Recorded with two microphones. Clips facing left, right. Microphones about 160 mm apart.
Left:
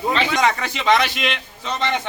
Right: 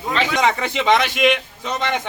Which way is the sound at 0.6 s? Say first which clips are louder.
Right 1 dB; 20° right (ahead or behind).